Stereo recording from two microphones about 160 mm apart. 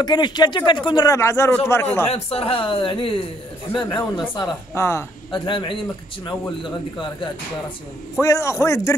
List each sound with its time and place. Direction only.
0.0 s speech: 25° left (ahead or behind)
2.0 s speech: 40° left (ahead or behind)
4.7 s a man's voice: 15° left (ahead or behind)
5.3 s speech: 30° left (ahead or behind)
8.2 s a man's voice: 20° left (ahead or behind)